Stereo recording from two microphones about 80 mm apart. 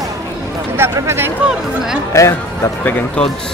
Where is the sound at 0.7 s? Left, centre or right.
Right.